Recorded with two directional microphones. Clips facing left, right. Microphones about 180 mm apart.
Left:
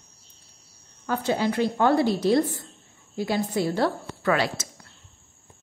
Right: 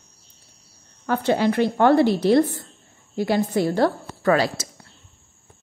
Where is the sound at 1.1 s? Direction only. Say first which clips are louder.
Right 4 dB; 65° right (ahead or behind); by 4.7 s 40° right (ahead or behind).